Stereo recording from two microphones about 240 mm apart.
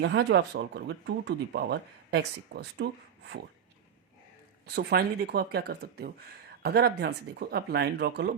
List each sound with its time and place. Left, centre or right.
0.0 s speech: right
4.6 s speech: right